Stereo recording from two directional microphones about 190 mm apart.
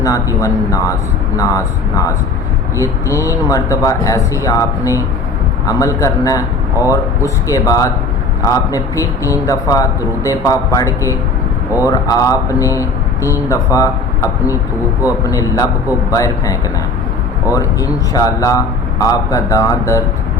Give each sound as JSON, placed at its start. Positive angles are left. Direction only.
{"t": 0.0, "sound": "a man's voice", "side_deg": 15}